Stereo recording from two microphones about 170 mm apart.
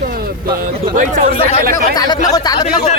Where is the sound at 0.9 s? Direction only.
50° right (ahead or behind).